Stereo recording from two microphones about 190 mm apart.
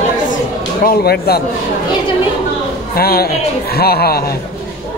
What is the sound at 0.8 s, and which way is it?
Speech, 55° left (ahead or behind).